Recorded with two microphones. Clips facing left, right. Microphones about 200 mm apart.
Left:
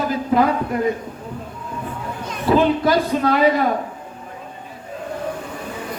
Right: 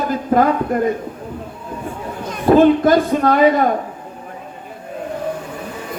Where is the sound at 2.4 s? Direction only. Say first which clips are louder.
Right 5 dB; 50° right (ahead or behind).